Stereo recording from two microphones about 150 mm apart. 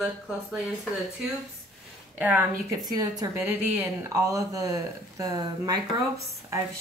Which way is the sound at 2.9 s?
25° right (ahead or behind).